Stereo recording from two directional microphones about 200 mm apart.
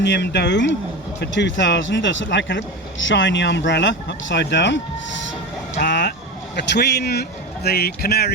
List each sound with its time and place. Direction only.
0.0 s speech: 60° left (ahead or behind)
5.9 s vehicle: 60° left (ahead or behind)
6.6 s a man's voice: 55° left (ahead or behind)